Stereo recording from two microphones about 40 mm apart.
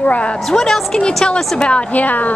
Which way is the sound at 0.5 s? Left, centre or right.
Centre.